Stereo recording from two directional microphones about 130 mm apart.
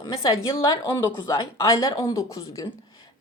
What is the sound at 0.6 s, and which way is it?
Speech, 20° left (ahead or behind).